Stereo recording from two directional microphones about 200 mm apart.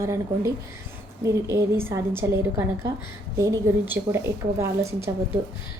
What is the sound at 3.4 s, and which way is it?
A woman's voice, 15° right (ahead or behind).